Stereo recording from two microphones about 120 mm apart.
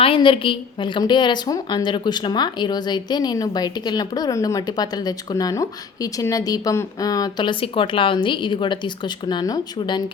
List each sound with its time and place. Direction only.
0.0 s a woman's voice: 45° left (ahead or behind)